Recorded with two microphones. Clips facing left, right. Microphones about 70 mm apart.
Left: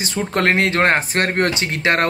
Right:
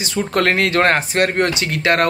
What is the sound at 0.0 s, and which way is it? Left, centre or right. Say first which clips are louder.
Speech: right 1 dB; left.